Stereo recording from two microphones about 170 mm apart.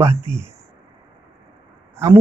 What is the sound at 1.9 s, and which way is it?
Speech, 15° right (ahead or behind).